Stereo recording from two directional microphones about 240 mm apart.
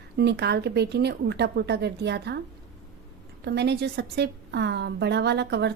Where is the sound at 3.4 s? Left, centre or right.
Right.